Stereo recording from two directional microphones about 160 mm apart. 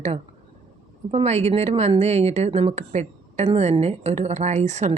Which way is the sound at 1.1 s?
40° right (ahead or behind).